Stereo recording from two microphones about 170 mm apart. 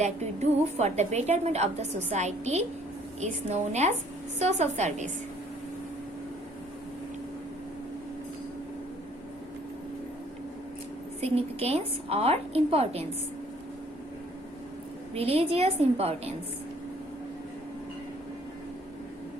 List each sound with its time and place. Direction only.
0.0 s a woman's voice: 40° right (ahead or behind)
11.2 s a woman's voice: 35° right (ahead or behind)
15.1 s a woman's voice: 35° right (ahead or behind)